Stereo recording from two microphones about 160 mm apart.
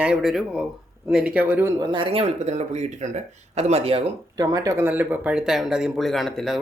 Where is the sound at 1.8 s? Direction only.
30° right (ahead or behind).